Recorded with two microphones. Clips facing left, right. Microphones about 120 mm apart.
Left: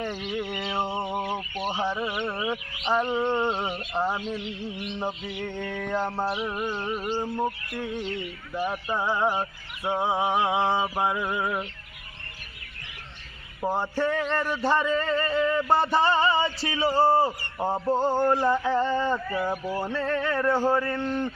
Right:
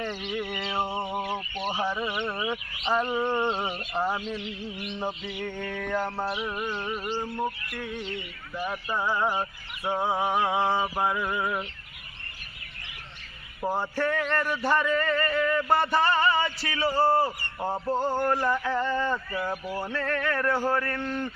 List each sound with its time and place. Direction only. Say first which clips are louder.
0.0 s a sound: left 1 dB; 10° left (ahead or behind)
0.6 s a sound: left 1 dB; centre (ahead or behind)
1.3 s speech: left 1 dB; 10° left (ahead or behind)
1.7 s speech: left 1 dB; 5° right (ahead or behind)
3.0 s speech: left 2 dB; 20° left (ahead or behind)
3.5 s speech: left 1 dB; centre (ahead or behind)
4.9 s a sound: even; 10° left (ahead or behind)
5.3 s speech: left 1 dB; 5° right (ahead or behind)
5.9 s speech: left 2 dB; 20° left (ahead or behind)
6.4 s speech: left 2 dB; centre (ahead or behind)
7.0 s speech: left 3 dB; 20° left (ahead or behind)
11.0 s a sound: left 1 dB; 15° left (ahead or behind)
13.6 s speech: left 2 dB; 20° left (ahead or behind)